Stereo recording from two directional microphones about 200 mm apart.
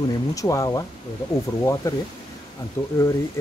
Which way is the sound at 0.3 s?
15° left (ahead or behind).